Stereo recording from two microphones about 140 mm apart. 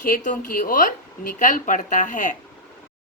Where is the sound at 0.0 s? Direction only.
75° left (ahead or behind).